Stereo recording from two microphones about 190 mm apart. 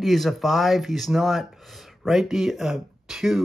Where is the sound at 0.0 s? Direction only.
Centre (ahead or behind).